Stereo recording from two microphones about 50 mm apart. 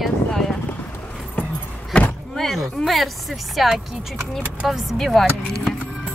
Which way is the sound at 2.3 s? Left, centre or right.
Centre.